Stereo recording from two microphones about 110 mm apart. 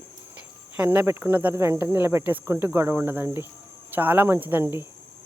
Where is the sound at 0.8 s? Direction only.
15° right (ahead or behind).